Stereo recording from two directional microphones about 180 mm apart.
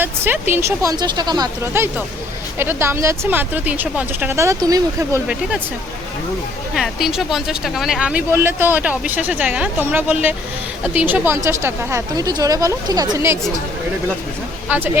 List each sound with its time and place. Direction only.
0.0 s speech: 10° right (ahead or behind)
6.7 s speech: centre (ahead or behind)
14.7 s speech: 10° right (ahead or behind)